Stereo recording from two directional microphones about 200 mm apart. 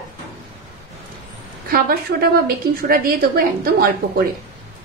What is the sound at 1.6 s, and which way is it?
A woman's voice, 45° right (ahead or behind).